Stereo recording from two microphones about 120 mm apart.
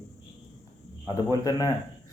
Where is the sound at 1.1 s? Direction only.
30° left (ahead or behind).